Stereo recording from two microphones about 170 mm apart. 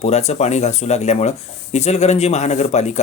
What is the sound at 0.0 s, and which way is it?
Speech, 40° left (ahead or behind).